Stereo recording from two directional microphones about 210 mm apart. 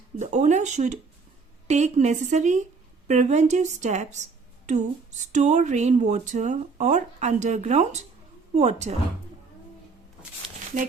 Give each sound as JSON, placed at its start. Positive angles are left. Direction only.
{"t": 0.2, "sound": "a woman's voice", "side_deg": -35}